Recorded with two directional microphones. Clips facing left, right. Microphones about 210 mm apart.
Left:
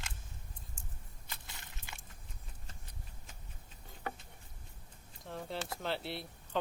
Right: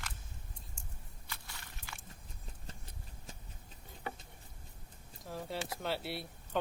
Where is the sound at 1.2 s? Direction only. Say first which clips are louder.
Right 1 dB; 20° left (ahead or behind).